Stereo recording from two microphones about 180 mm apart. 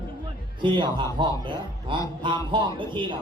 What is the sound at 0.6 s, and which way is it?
Speech, 25° right (ahead or behind).